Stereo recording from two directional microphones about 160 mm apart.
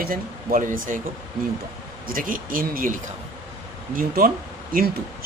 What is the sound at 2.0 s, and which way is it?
Speech, 60° right (ahead or behind).